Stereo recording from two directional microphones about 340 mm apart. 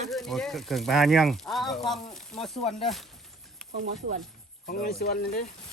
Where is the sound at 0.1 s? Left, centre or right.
Centre.